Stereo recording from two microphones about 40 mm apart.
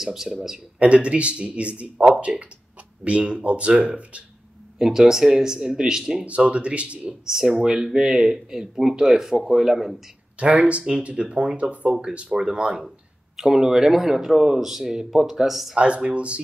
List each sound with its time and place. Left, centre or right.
0.0 s speech: centre
0.7 s speech: right
4.7 s speech: centre
6.2 s speech: right
7.2 s speech: centre
10.4 s speech: right
12.4 s speech: centre
15.7 s speech: right